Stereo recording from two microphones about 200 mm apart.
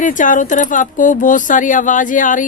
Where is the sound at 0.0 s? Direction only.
40° left (ahead or behind).